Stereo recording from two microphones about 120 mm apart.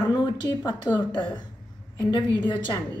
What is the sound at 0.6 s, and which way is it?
A woman's voice, 35° left (ahead or behind).